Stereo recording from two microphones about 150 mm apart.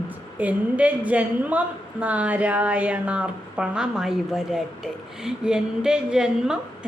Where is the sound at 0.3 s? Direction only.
10° right (ahead or behind).